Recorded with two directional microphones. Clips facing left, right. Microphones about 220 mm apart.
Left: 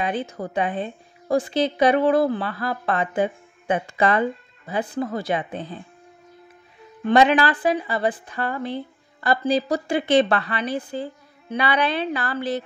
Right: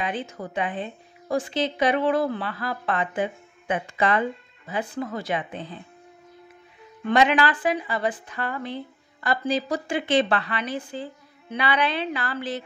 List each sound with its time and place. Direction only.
0.0 s a woman's voice: 40° left (ahead or behind)
7.1 s a woman's voice: 35° left (ahead or behind)